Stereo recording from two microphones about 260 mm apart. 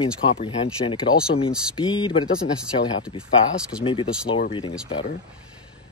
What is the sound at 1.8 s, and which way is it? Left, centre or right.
Speech, centre.